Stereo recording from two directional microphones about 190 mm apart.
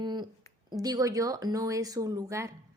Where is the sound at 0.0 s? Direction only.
20° right (ahead or behind).